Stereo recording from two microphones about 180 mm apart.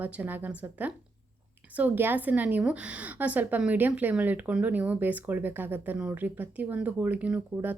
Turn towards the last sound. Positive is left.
turn(degrees=-10)  # may be behind; listen again after turning